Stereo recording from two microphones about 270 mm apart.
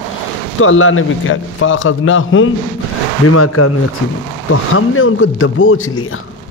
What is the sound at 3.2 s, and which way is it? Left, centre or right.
A man's voice, left.